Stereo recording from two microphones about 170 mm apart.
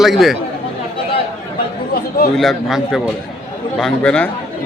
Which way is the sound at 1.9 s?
60° left (ahead or behind).